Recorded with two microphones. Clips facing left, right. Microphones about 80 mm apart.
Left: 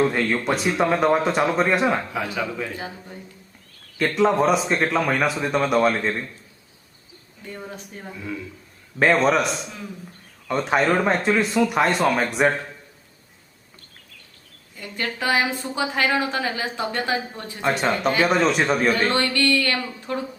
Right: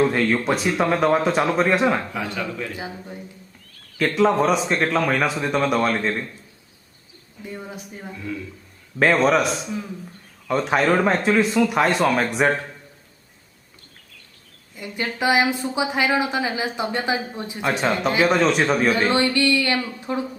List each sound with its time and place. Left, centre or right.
0.0 s speech: centre
2.7 s a woman's voice: centre
3.9 s speech: centre
7.4 s a woman's voice: centre
14.8 s a woman's voice: centre
17.6 s a woman's voice: centre